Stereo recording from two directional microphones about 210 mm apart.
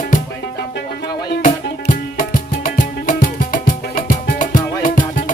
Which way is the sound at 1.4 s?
40° left (ahead or behind).